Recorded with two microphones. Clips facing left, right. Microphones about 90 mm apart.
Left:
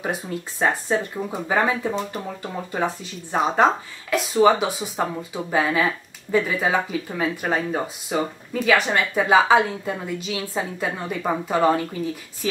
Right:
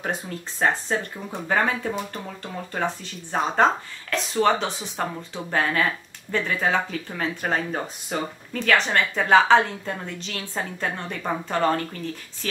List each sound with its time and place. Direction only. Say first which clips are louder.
0.0 s speech: left 2 dB; 10° left (ahead or behind)